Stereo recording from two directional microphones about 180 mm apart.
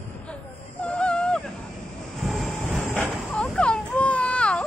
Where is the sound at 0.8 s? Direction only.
5° left (ahead or behind).